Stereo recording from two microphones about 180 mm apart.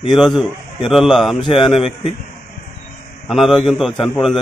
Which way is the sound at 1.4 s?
30° left (ahead or behind).